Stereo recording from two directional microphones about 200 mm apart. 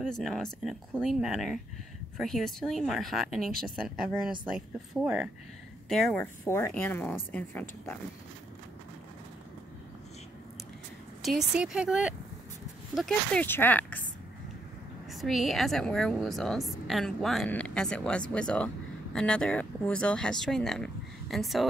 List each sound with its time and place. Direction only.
0.0 s a woman's voice: centre (ahead or behind)
6.4 s speech: 15° left (ahead or behind)
11.2 s a woman's voice: 5° right (ahead or behind)
15.1 s a woman's voice: centre (ahead or behind)